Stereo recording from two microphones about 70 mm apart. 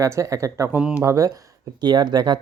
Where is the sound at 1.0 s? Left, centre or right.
Right.